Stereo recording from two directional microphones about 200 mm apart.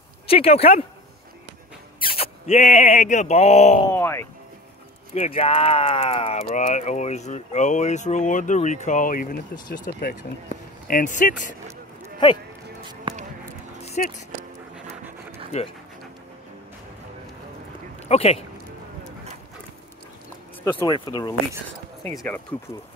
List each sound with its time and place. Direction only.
0.3 s speech: 30° left (ahead or behind)
2.0 s speech: 30° left (ahead or behind)
3.8 s speech: 10° left (ahead or behind)
5.1 s speech: 30° left (ahead or behind)
14.0 s speech: 40° left (ahead or behind)
18.0 s speech: 30° left (ahead or behind)
20.6 s speech: 20° left (ahead or behind)
22.2 s speech: 5° left (ahead or behind)